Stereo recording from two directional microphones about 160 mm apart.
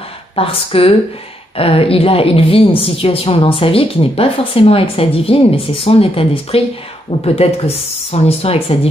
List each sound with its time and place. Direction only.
0.4 s a woman's voice: 35° left (ahead or behind)